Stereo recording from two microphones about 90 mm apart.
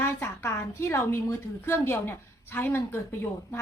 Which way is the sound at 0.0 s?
25° left (ahead or behind).